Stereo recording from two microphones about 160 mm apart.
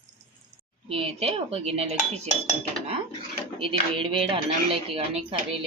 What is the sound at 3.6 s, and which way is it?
Speech, 35° right (ahead or behind).